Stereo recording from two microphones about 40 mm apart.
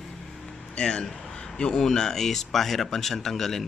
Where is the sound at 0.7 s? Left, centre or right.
Centre.